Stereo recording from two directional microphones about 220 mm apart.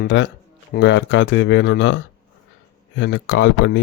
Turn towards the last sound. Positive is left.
turn(degrees=55)  # may be behind; listen again after turning